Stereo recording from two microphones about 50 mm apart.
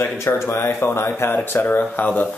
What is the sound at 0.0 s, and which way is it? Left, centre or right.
Speech, left.